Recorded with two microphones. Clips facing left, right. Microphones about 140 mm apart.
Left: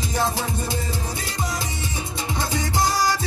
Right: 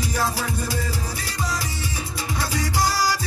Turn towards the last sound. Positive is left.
turn(degrees=20)  # may be behind; listen again after turning